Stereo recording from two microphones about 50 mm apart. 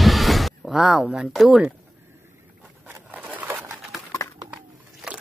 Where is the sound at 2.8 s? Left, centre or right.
Right.